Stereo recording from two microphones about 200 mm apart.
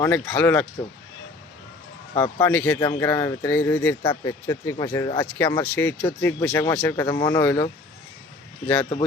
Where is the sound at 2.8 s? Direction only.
15° left (ahead or behind).